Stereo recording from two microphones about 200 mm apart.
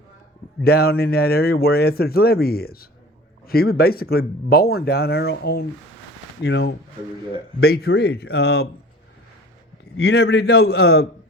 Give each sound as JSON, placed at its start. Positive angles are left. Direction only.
{"t": 0.6, "sound": "speech", "side_deg": 50}
{"t": 10.0, "sound": "speech", "side_deg": 55}